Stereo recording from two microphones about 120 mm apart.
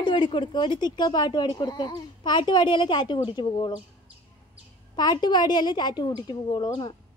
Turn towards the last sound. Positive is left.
turn(degrees=40)  # may be behind; listen again after turning